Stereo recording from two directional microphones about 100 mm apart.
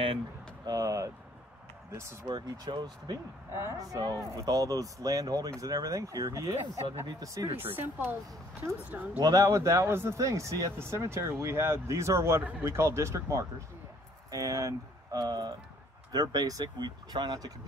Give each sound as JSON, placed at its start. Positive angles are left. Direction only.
{"t": 0.7, "sound": "speech", "side_deg": -35}
{"t": 2.2, "sound": "speech", "side_deg": -40}
{"t": 3.5, "sound": "speech", "side_deg": -25}
{"t": 3.8, "sound": "speech", "side_deg": -35}
{"t": 7.6, "sound": "speech", "side_deg": -20}
{"t": 9.2, "sound": "speech", "side_deg": -35}